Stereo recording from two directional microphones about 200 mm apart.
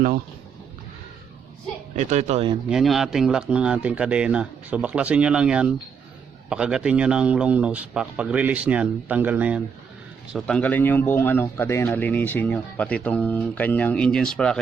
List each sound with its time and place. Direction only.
2.0 s speech: 35° right (ahead or behind)
2.6 s a man's voice: centre (ahead or behind)
10.3 s speech: 5° left (ahead or behind)